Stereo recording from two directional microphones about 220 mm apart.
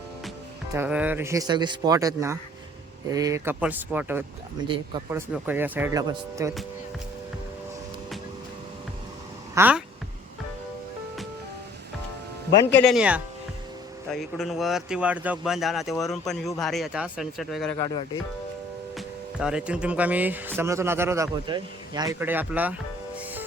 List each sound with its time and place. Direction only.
0.7 s speech: 10° right (ahead or behind)
9.6 s speech: 5° right (ahead or behind)
12.7 s speech: centre (ahead or behind)
17.7 s speech: 20° left (ahead or behind)
18.9 s speech: 5° right (ahead or behind)